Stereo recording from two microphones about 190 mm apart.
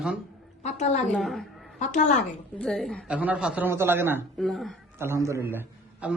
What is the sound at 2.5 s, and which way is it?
A man's voice, centre (ahead or behind).